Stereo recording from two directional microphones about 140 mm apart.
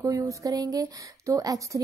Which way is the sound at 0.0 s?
25° right (ahead or behind).